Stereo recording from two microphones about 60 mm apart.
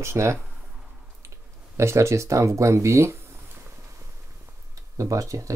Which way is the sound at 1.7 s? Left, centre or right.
Right.